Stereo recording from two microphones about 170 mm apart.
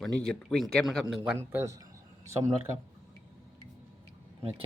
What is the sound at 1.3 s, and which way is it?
Speech, 15° right (ahead or behind).